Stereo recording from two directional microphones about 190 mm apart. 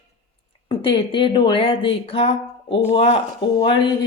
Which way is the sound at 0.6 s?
25° left (ahead or behind).